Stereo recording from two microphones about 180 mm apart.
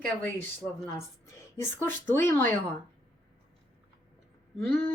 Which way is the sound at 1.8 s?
15° left (ahead or behind).